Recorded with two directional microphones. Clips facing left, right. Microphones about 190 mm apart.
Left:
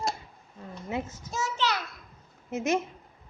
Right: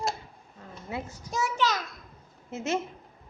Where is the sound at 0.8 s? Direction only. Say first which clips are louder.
Left 3 dB; 20° left (ahead or behind).